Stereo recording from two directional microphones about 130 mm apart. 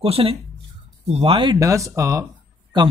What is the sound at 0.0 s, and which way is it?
Speech, 45° right (ahead or behind).